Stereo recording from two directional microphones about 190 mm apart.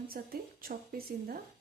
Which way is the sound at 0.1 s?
50° right (ahead or behind).